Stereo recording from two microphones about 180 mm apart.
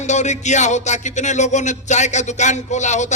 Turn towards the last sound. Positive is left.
turn(degrees=40)  # may be behind; listen again after turning